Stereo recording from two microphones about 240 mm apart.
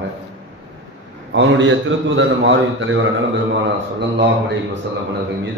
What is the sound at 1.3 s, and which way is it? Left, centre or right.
A man's voice, right.